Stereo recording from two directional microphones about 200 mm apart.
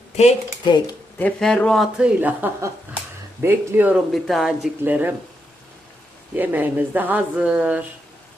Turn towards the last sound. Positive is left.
turn(degrees=-5)  # may be behind; listen again after turning